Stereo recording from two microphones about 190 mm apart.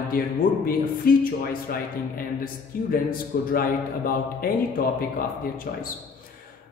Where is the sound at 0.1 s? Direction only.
50° left (ahead or behind).